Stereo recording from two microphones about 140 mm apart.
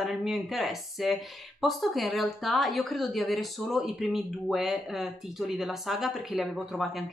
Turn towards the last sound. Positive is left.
turn(degrees=0)  # may be behind; listen again after turning